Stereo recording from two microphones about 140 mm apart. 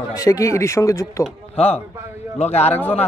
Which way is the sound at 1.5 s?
45° left (ahead or behind).